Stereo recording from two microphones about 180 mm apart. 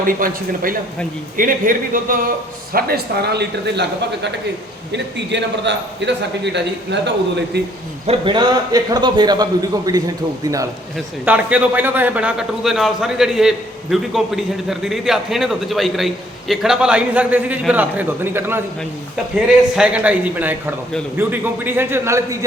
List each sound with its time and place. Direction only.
0.0 s a man's voice: 50° right (ahead or behind); by 7.6 s 75° right (ahead or behind)
8.0 s a man's voice: 30° right (ahead or behind)
10.9 s a man's voice: 10° right (ahead or behind)
19.7 s a man's voice: 5° right (ahead or behind)